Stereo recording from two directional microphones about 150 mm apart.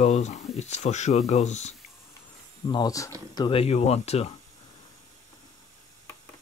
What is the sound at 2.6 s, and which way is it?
Speech, 25° left (ahead or behind).